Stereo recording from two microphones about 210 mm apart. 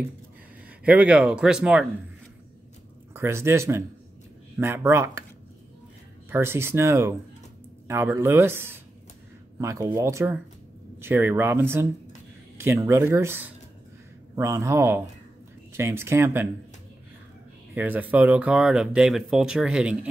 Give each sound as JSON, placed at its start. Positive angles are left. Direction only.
{"t": 0.8, "sound": "speech", "side_deg": -5}
{"t": 3.1, "sound": "speech", "side_deg": -10}
{"t": 6.3, "sound": "speech", "side_deg": -10}
{"t": 17.7, "sound": "speech", "side_deg": -10}